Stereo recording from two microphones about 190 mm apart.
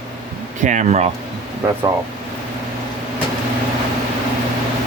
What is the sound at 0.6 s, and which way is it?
Speech, 40° right (ahead or behind).